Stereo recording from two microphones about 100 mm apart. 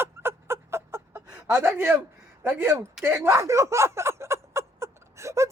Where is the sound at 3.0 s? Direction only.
25° right (ahead or behind).